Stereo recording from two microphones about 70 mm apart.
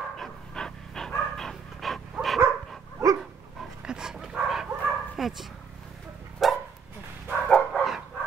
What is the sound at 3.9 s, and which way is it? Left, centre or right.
Dog, centre.